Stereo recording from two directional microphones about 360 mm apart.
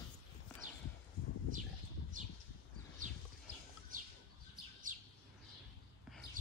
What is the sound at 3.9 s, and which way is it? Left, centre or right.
Bird, right.